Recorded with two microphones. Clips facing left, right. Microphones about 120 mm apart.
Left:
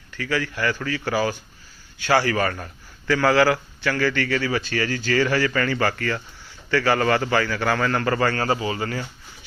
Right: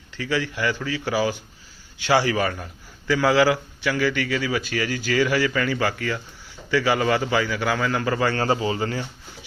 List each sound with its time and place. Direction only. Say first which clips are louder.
0.1 s a man's voice: even; 20° right (ahead or behind)
8.3 s speech: right 1 dB; 25° right (ahead or behind)